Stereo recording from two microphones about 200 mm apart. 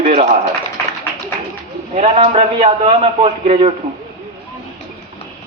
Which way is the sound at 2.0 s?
30° right (ahead or behind).